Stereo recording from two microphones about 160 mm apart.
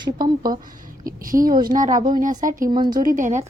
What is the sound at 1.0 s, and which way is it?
Speech, 60° right (ahead or behind).